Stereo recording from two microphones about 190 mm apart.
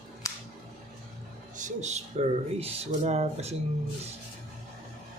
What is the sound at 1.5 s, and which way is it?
Speech, 40° right (ahead or behind).